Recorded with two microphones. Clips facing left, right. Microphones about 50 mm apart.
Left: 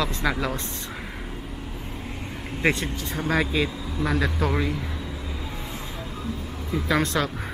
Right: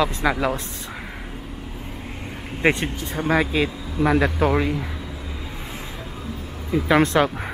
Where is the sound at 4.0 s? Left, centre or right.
Right.